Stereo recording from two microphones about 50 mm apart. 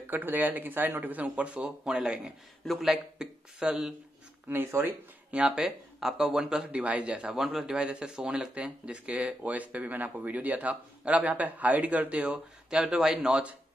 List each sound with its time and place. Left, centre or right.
0.0 s speech: right; by 2.3 s centre
2.6 s speech: centre
4.5 s speech: right
5.3 s speech: centre
5.7 s speech: centre
6.8 s speech: right
7.2 s speech: centre; by 12.4 s right
12.6 s speech: centre